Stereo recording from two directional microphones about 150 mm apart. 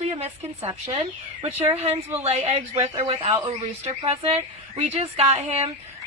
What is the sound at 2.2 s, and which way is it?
Speech, 45° right (ahead or behind).